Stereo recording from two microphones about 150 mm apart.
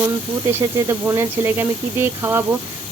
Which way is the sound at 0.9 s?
20° right (ahead or behind).